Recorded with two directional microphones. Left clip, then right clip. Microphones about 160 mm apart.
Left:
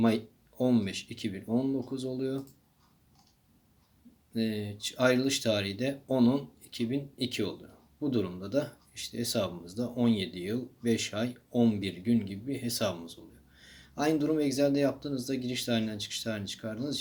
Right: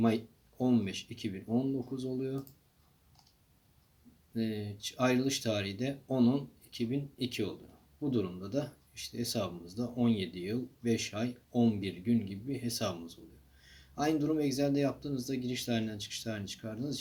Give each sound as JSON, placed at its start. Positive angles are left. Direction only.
{"t": 0.6, "sound": "speech", "side_deg": 20}
{"t": 4.4, "sound": "speech", "side_deg": 20}